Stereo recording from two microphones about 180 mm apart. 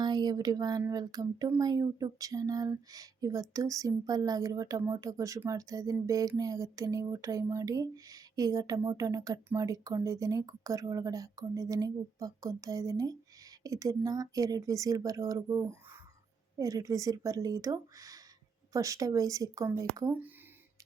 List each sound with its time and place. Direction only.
0.0 s speech: 25° right (ahead or behind)